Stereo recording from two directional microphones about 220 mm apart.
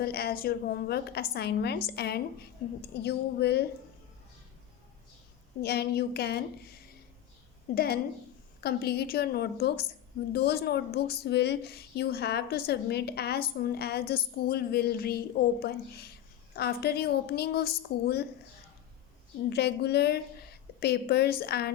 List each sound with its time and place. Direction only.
0.0 s a woman's voice: 45° left (ahead or behind)
5.6 s a woman's voice: 45° left (ahead or behind)
7.7 s a woman's voice: 40° left (ahead or behind)
19.5 s a woman's voice: 50° left (ahead or behind)